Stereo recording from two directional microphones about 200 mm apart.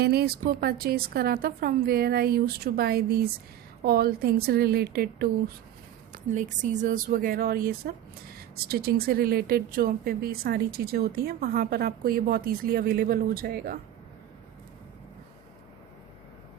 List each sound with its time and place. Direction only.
0.0 s speech: 50° right (ahead or behind)
6.3 s speech: 40° right (ahead or behind)